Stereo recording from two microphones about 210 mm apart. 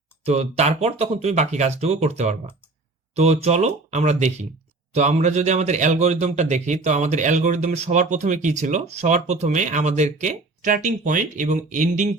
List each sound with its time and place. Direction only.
0.3 s a man's voice: 30° right (ahead or behind)